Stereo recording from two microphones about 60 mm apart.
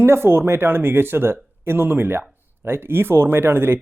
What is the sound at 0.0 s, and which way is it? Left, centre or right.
Speech, right.